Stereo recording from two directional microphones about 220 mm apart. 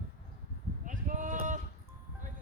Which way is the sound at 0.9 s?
35° right (ahead or behind).